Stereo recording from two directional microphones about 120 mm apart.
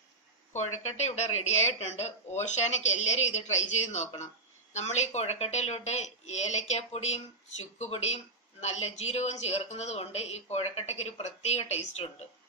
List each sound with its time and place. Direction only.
0.5 s speech: 70° left (ahead or behind)